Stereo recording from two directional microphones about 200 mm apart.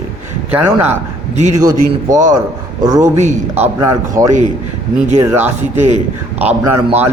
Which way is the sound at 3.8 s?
15° right (ahead or behind).